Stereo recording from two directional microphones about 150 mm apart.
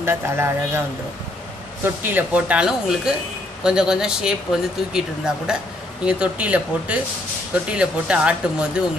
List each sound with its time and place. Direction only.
0.0 s speech: 15° right (ahead or behind)
2.0 s speech: 10° right (ahead or behind)